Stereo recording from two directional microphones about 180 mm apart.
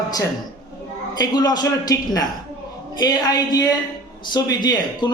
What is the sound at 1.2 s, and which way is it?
A man's voice, 20° left (ahead or behind).